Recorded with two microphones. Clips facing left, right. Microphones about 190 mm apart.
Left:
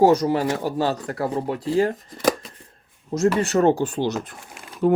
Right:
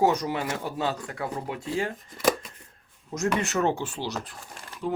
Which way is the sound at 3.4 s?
35° left (ahead or behind).